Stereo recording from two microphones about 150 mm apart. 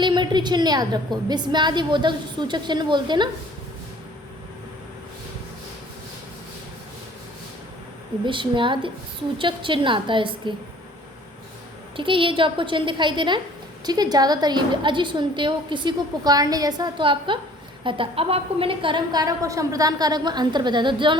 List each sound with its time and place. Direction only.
0.0 s a woman's voice: 30° right (ahead or behind)
8.2 s a woman's voice: 35° right (ahead or behind)
11.9 s a woman's voice: 35° right (ahead or behind)